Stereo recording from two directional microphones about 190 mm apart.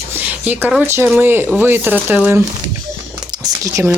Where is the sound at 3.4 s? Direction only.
15° right (ahead or behind).